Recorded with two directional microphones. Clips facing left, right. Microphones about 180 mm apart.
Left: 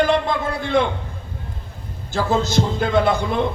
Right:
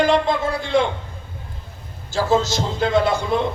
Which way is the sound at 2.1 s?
55° left (ahead or behind).